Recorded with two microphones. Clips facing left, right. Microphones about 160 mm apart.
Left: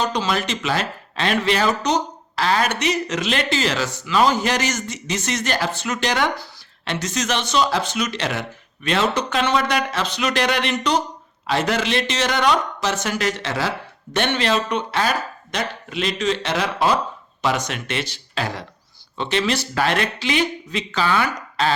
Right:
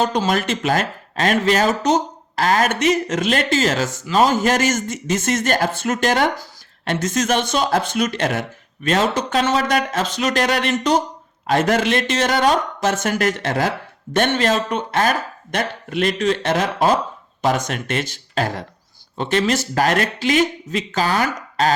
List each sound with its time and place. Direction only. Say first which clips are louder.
0.0 s speech: right 3 dB; 50° right (ahead or behind)